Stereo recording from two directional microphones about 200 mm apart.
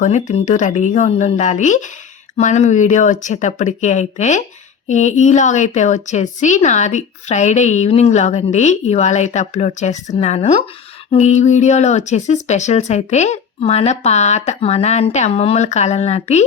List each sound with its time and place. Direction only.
0.0 s speech: 35° left (ahead or behind)